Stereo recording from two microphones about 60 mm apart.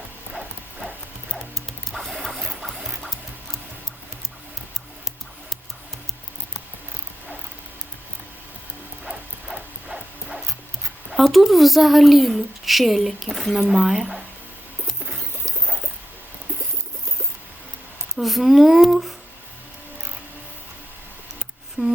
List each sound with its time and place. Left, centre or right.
0.3 s clip-clop: centre
1.4 s music: centre
2.6 s a sound: centre
9.0 s music: centre
11.1 s a woman's voice: centre
18.1 s a woman's voice: centre
21.8 s a sound: centre